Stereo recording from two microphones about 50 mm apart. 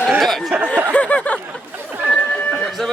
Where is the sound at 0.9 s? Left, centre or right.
Left.